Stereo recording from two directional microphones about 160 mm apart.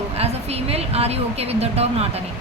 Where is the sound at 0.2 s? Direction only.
40° right (ahead or behind).